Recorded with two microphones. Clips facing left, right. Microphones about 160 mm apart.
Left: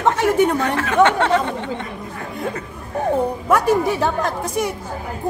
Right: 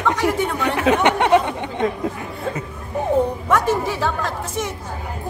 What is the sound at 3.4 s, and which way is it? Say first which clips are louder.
A woman's voice: left 3 dB; 10° left (ahead or behind).